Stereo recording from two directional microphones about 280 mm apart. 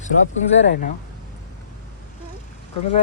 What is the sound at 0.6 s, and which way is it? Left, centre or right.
Speech, left.